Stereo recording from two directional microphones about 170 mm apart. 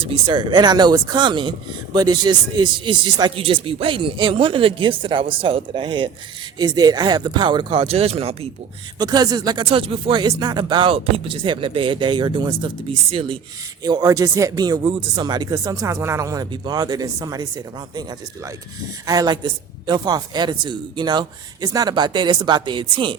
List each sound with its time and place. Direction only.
0.0 s speech: 30° right (ahead or behind)
9.0 s speech: 25° right (ahead or behind)
19.0 s speech: 25° right (ahead or behind)